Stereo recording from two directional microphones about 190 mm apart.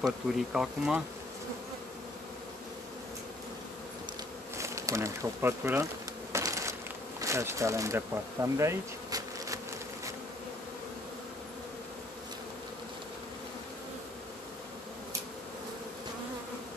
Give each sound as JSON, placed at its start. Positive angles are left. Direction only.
{"t": 0.4, "sound": "speech", "side_deg": 0}
{"t": 4.6, "sound": "speech", "side_deg": -15}
{"t": 6.3, "sound": "bee", "side_deg": -15}